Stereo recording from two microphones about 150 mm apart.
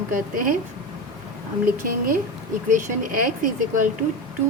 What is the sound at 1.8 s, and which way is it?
A woman's voice, 70° right (ahead or behind).